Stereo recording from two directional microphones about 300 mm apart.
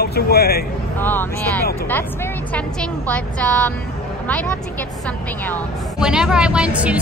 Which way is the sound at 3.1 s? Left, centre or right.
Centre.